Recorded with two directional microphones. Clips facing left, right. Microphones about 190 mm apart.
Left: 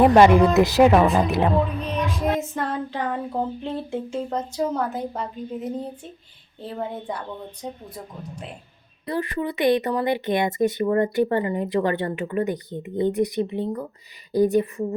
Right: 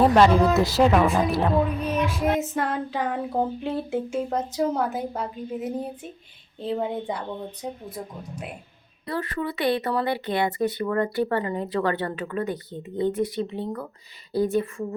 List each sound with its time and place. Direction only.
0.0 s speech: 15° left (ahead or behind)
2.2 s speech: 10° right (ahead or behind)
9.0 s speech: 20° left (ahead or behind)